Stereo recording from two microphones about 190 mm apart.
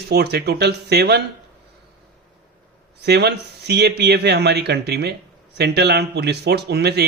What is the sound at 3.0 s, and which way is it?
A man's voice, 60° right (ahead or behind).